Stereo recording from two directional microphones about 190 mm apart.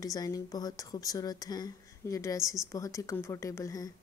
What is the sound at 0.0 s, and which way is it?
Speech, 20° left (ahead or behind).